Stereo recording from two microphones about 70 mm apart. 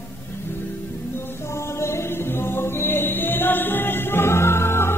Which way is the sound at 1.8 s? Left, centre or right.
Left.